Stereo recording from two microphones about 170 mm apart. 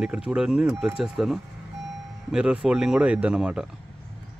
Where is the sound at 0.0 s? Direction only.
5° right (ahead or behind).